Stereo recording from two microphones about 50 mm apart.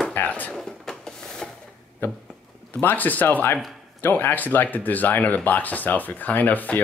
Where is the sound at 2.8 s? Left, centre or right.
Left.